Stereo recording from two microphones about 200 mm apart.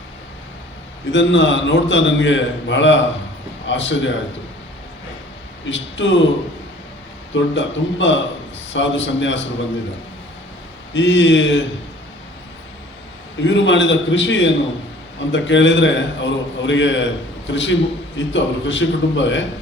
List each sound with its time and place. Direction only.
1.1 s a man's voice: 65° left (ahead or behind)
5.6 s a man's voice: 65° left (ahead or behind)
7.3 s a man's voice: 65° left (ahead or behind)
10.9 s a man's voice: 65° left (ahead or behind)
13.4 s a man's voice: 65° left (ahead or behind)